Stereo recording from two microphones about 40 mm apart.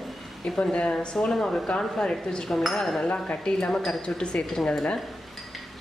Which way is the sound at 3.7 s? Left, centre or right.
Centre.